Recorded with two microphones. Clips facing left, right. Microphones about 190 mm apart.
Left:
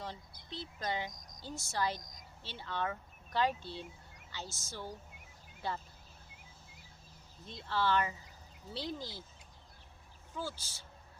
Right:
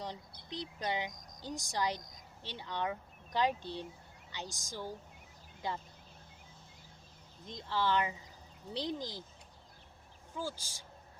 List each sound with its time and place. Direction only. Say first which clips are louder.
0.0 s a woman's voice: right 2 dB; 15° right (ahead or behind)
7.7 s a woman's voice: even; 15° right (ahead or behind)
10.3 s a woman's voice: right 1 dB; 10° right (ahead or behind)